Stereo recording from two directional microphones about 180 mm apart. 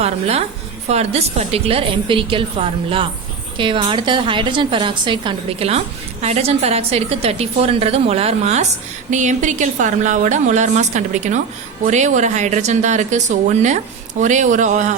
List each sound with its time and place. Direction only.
0.0 s a woman's voice: 35° right (ahead or behind)